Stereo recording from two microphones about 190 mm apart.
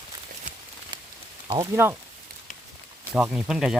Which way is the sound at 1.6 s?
15° right (ahead or behind).